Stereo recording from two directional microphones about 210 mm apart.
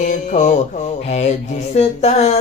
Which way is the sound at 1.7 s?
30° left (ahead or behind).